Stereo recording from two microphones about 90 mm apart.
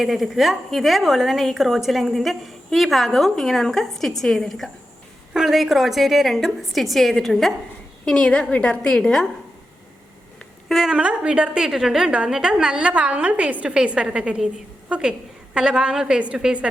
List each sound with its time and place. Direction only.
0.0 s a woman's voice: centre (ahead or behind)
10.7 s a woman's voice: 5° right (ahead or behind)